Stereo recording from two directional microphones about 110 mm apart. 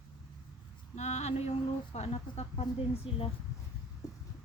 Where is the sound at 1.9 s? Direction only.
75° left (ahead or behind).